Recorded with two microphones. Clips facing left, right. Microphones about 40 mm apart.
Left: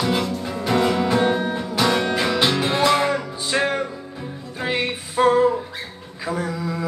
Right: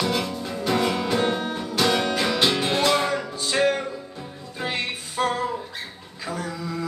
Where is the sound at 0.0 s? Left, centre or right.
Centre.